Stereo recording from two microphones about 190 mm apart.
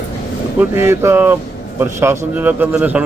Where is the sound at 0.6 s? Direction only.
10° right (ahead or behind).